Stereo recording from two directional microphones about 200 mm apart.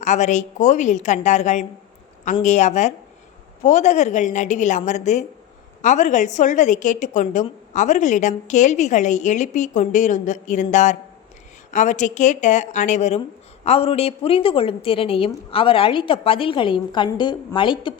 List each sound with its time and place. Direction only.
0.0 s a woman's voice: 35° left (ahead or behind)